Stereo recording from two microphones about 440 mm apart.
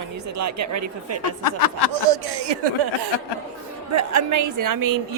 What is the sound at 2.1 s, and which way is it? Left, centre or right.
Speech, right.